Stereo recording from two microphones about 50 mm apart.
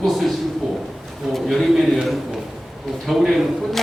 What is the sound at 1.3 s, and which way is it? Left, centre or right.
A man's voice, centre.